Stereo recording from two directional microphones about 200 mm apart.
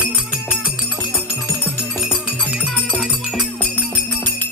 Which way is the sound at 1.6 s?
10° left (ahead or behind).